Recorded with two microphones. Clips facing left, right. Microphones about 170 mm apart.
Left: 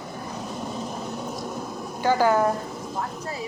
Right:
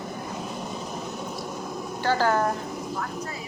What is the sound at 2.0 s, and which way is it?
Speech, 15° left (ahead or behind).